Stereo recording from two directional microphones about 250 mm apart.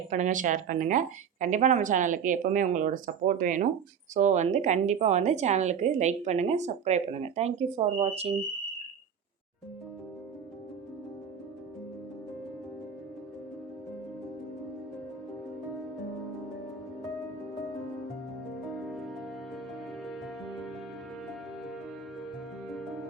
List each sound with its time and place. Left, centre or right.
0.1 s a woman's voice: right
18.9 s music: centre